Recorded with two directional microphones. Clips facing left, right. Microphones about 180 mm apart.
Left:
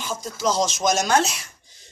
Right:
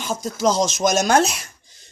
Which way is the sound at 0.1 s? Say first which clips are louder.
Right 4 dB; 45° right (ahead or behind).